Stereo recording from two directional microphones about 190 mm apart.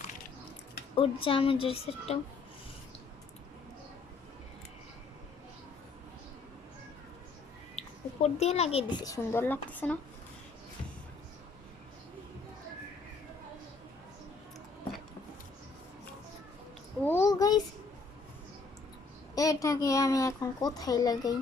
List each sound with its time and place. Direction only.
0.9 s a woman's voice: 30° left (ahead or behind)
7.8 s a woman's voice: 35° left (ahead or behind); by 10.0 s 10° left (ahead or behind)
17.1 s a sound: 15° left (ahead or behind)
19.4 s a child's voice: 15° left (ahead or behind)